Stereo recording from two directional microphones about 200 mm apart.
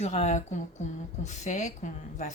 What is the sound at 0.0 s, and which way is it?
Speech, 35° left (ahead or behind).